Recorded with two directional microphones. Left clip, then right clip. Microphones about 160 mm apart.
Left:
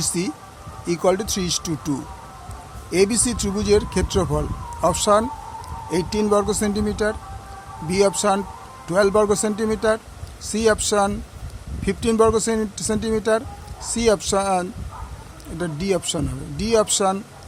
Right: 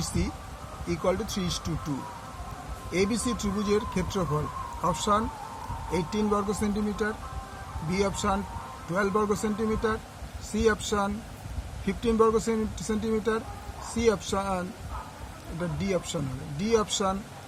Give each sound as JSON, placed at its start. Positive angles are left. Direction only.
{"t": 0.9, "sound": "speech", "side_deg": 90}
{"t": 2.9, "sound": "speech", "side_deg": 90}
{"t": 15.8, "sound": "speech", "side_deg": 85}